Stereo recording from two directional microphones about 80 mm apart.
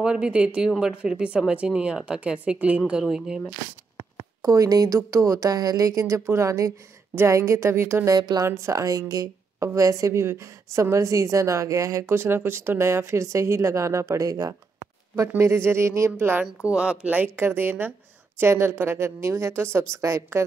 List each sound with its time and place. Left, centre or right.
0.0 s speech: centre
4.4 s speech: right
8.1 s speech: right
8.5 s speech: right
12.2 s speech: right
15.2 s speech: right